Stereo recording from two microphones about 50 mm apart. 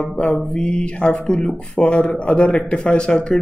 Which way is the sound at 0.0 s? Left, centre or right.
Left.